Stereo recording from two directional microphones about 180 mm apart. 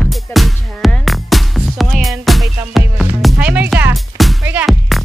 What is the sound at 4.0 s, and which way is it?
Music, centre (ahead or behind).